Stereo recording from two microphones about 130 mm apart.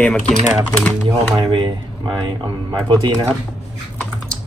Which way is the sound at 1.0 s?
35° right (ahead or behind).